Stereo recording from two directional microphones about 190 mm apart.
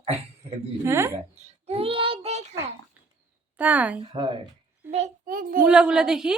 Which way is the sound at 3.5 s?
5° right (ahead or behind).